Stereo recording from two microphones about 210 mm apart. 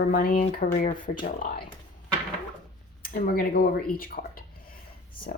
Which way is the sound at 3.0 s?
45° left (ahead or behind).